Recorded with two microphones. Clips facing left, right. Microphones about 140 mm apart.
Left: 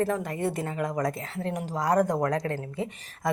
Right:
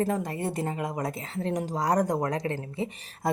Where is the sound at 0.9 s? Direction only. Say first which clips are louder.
Left 3 dB; 25° right (ahead or behind).